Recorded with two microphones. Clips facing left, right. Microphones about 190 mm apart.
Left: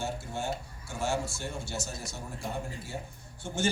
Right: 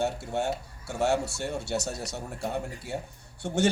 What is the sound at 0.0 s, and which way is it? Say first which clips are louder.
A man's voice: right 6 dB; 65° right (ahead or behind).